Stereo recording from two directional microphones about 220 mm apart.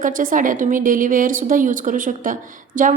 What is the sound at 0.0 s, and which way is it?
A woman's voice, 40° right (ahead or behind).